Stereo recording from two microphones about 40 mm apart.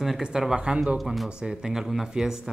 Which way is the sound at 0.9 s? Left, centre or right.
Centre.